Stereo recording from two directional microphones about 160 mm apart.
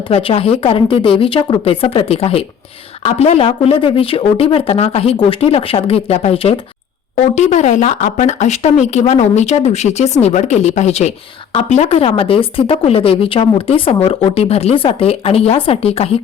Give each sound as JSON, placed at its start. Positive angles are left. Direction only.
{"t": 0.1, "sound": "speech", "side_deg": 35}